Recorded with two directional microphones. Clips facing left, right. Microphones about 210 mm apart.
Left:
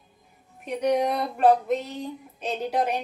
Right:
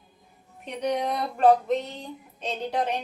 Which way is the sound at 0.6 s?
5° left (ahead or behind).